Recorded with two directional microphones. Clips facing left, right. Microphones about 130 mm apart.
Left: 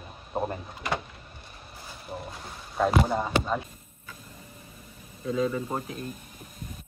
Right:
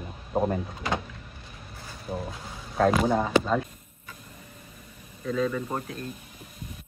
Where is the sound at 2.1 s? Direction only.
5° left (ahead or behind).